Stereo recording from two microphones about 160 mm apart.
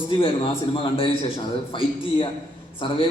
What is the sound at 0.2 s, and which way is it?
A man's voice, 35° left (ahead or behind).